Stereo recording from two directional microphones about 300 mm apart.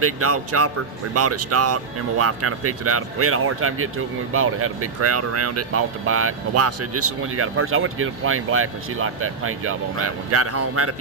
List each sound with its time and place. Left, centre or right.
0.0 s speech: right